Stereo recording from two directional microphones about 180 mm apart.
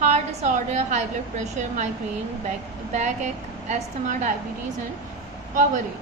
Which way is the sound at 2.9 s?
40° right (ahead or behind).